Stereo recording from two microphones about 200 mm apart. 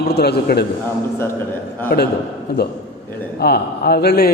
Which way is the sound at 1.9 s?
50° left (ahead or behind).